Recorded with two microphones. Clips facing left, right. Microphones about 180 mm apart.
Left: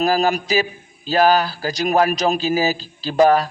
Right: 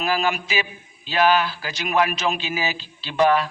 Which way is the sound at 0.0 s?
40° left (ahead or behind).